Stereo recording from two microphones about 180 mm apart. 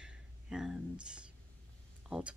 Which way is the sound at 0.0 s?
5° right (ahead or behind).